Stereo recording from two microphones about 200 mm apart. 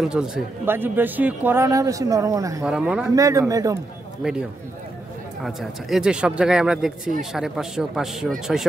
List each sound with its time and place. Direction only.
0.0 s a man's voice: 5° right (ahead or behind)
2.6 s speech: 5° right (ahead or behind)
3.2 s a man's voice: 15° right (ahead or behind)
4.2 s speech: 5° right (ahead or behind)